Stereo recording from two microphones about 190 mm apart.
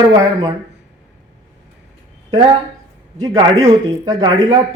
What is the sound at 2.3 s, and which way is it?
Speech, 20° right (ahead or behind).